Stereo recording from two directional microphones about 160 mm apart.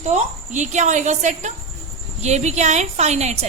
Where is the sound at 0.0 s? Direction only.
45° right (ahead or behind).